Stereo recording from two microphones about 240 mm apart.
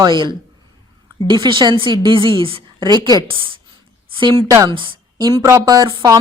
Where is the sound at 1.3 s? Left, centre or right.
Centre.